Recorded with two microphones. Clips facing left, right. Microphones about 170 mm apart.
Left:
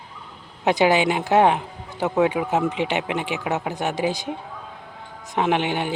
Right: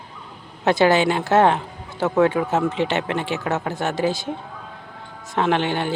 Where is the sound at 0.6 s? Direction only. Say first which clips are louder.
Right 2 dB; 15° left (ahead or behind).